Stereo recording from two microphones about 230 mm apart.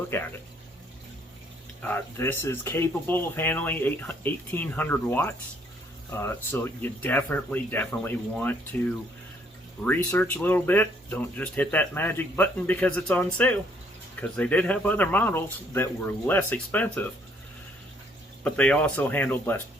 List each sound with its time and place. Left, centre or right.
0.1 s speech: centre
1.9 s speech: centre
18.4 s speech: centre